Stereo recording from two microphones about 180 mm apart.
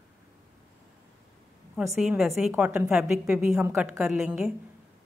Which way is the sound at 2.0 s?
Centre (ahead or behind).